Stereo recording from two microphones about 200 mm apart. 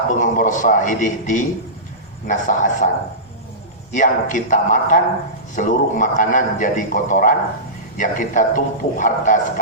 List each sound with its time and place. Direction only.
0.2 s a man's voice: 40° left (ahead or behind)
3.9 s a man's voice: 40° left (ahead or behind)